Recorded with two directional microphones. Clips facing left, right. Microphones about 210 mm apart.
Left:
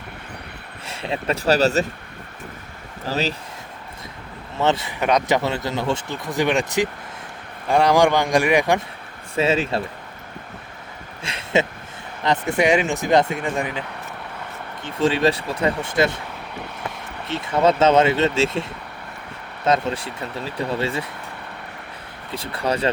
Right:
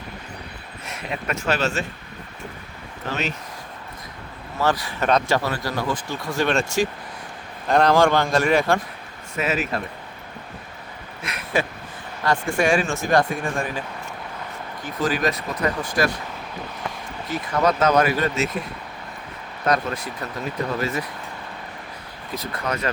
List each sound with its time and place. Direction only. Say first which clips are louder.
0.9 s speech: left 4 dB; 30° left (ahead or behind)
3.1 s speech: left 3 dB; 35° left (ahead or behind)
4.5 s a man's voice: left 2 dB; 25° left (ahead or behind)
9.3 s speech: left 4 dB; 30° left (ahead or behind)
11.2 s speech: left 3 dB; 30° left (ahead or behind)
14.8 s speech: left 4 dB; 25° left (ahead or behind)
17.2 s speech: left 3 dB; 25° left (ahead or behind)
22.3 s speech: left 4 dB; 30° left (ahead or behind)